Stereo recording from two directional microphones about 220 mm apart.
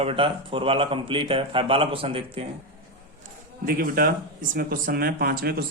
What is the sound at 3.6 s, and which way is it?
Speech, 40° right (ahead or behind).